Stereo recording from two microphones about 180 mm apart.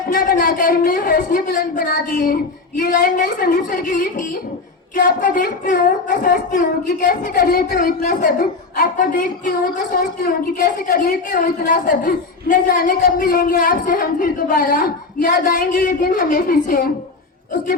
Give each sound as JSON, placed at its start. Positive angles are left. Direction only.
{"t": 0.1, "sound": "speech", "side_deg": 55}